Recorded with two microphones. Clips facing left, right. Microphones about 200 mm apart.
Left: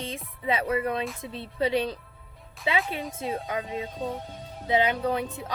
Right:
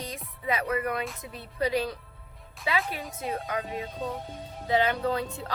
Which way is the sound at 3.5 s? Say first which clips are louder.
Left 1 dB; 20° left (ahead or behind).